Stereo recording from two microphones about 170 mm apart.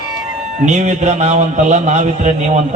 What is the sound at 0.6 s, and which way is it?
A man's voice, 45° right (ahead or behind).